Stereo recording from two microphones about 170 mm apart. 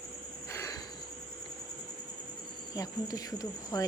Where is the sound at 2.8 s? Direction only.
20° left (ahead or behind).